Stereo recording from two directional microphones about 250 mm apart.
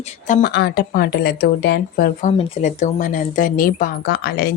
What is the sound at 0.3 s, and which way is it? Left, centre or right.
Speech, left.